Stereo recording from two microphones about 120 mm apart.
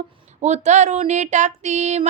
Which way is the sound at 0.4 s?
70° right (ahead or behind).